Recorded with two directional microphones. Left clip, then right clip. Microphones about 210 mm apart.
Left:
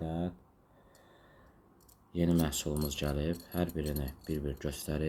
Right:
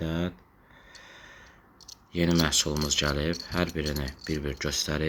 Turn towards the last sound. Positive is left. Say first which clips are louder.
# right 8 dB
turn(degrees=-5)  # may be behind; listen again after turning